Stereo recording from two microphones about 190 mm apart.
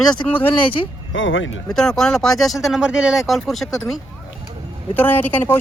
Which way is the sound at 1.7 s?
5° left (ahead or behind).